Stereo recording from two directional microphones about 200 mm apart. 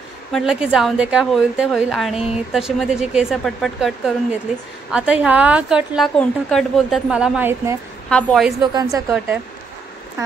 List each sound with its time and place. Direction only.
0.3 s a woman's voice: 5° right (ahead or behind)
8.1 s a woman's voice: 5° left (ahead or behind)
8.7 s a woman's voice: 15° right (ahead or behind)